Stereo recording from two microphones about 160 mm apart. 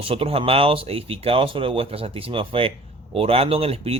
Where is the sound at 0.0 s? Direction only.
35° right (ahead or behind).